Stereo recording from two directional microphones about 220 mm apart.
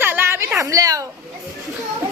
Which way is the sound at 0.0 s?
10° right (ahead or behind).